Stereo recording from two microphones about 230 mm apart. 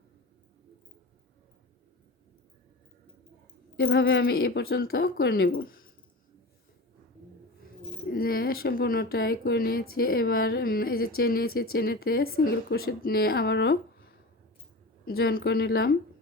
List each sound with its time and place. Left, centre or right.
3.8 s speech: left
8.1 s speech: left
15.0 s a woman's voice: left